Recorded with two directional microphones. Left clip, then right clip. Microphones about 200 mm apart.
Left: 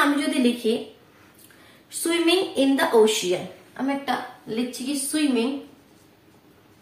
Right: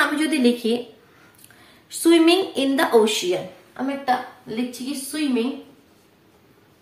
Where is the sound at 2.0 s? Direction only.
50° right (ahead or behind).